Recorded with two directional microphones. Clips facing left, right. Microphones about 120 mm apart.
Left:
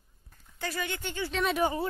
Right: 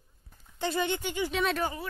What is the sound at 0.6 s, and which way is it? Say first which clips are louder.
Speech: right 5 dB; 25° right (ahead or behind).